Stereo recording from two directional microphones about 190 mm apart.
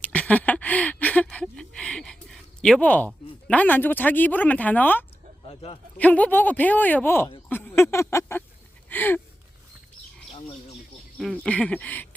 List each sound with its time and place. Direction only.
0.0 s a sound: 5° left (ahead or behind)
3.4 s speech: 5° left (ahead or behind)
5.5 s a man's voice: 30° left (ahead or behind)
6.0 s speech: 10° left (ahead or behind)
7.5 s a sound: 10° left (ahead or behind)
8.9 s gasp: 10° left (ahead or behind)
11.2 s speech: 5° left (ahead or behind)